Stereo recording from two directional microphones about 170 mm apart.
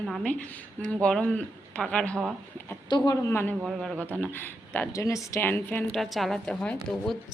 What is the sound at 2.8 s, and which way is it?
Speech, 25° left (ahead or behind).